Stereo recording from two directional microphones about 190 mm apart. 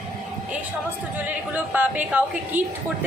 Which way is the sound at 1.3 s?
10° right (ahead or behind).